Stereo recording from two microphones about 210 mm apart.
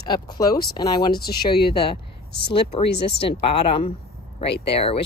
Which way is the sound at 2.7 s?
30° left (ahead or behind).